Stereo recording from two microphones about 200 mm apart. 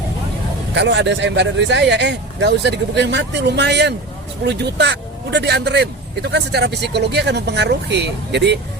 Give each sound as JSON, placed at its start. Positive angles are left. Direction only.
{"t": 0.7, "sound": "speech", "side_deg": -60}